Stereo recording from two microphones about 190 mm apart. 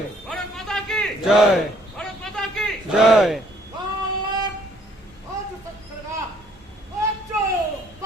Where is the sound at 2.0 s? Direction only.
5° left (ahead or behind).